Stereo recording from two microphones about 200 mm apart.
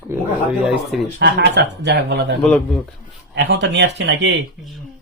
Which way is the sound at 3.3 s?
55° right (ahead or behind).